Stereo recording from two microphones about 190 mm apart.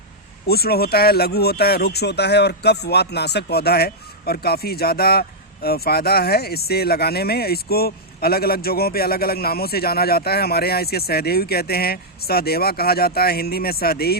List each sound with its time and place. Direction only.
0.4 s speech: 55° left (ahead or behind)